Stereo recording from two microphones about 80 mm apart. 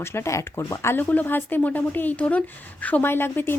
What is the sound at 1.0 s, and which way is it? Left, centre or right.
Speech, left.